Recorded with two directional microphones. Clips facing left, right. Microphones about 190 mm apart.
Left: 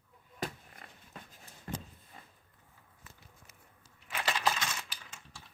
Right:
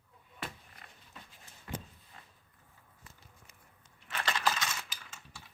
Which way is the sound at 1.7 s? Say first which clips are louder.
Left 1 dB; 40° left (ahead or behind).